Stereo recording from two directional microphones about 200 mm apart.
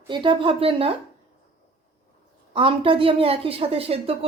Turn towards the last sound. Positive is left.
turn(degrees=-30)  # may be behind; listen again after turning